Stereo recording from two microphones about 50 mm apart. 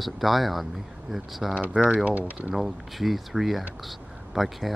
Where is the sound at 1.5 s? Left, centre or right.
Right.